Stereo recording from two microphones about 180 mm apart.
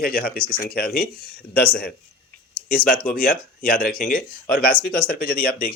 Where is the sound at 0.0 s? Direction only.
55° left (ahead or behind).